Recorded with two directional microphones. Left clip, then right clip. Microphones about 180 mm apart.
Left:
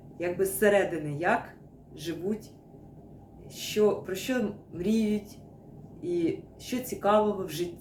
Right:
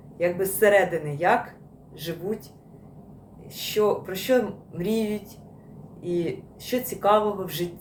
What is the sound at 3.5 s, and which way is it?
Speech, 15° left (ahead or behind).